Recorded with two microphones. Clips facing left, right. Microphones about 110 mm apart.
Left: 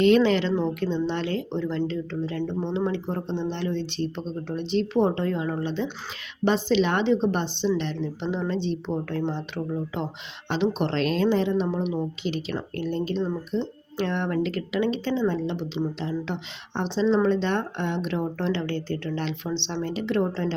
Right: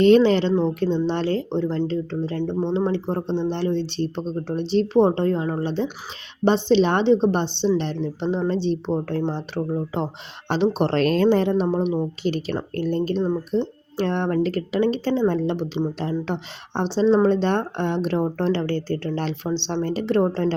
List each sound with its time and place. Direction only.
0.0 s speech: 35° right (ahead or behind)
15.3 s speech: 50° right (ahead or behind)